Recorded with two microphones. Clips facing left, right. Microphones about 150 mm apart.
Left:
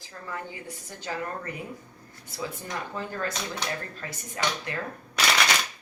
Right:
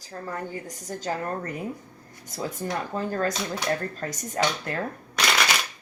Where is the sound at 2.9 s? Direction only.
40° right (ahead or behind).